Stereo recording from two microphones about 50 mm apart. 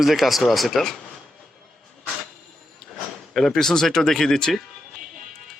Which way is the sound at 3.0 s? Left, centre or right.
Centre.